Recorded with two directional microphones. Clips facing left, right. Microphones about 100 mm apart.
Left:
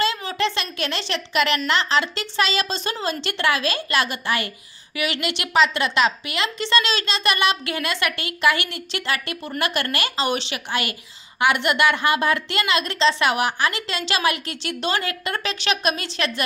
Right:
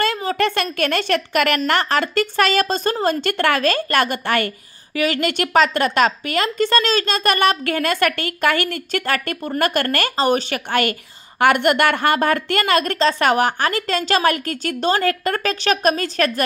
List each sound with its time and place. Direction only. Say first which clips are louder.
0.0 s a woman's voice: right 3 dB; 45° right (ahead or behind)
4.9 s a woman's voice: right 6 dB; 40° right (ahead or behind)